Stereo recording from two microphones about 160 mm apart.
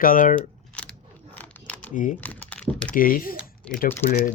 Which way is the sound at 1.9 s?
55° left (ahead or behind).